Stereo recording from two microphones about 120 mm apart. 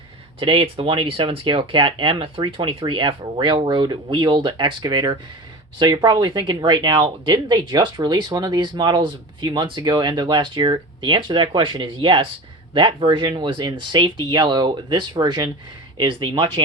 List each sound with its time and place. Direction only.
0.3 s speech: 45° right (ahead or behind)